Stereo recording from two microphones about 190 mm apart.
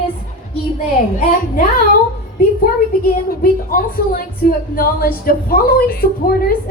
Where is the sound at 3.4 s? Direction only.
50° left (ahead or behind).